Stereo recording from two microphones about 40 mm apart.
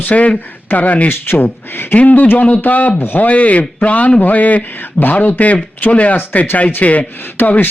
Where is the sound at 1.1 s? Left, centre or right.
Left.